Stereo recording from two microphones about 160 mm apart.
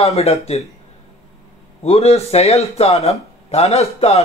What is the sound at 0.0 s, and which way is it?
Speech, 40° left (ahead or behind).